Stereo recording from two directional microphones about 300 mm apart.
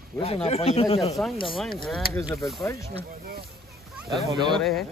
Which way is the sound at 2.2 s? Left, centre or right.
Centre.